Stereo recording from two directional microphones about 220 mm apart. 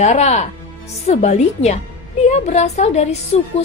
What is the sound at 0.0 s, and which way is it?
A woman's voice, 30° left (ahead or behind).